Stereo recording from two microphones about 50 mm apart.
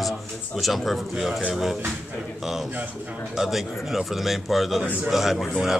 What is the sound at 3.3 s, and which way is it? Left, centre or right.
Speech, centre.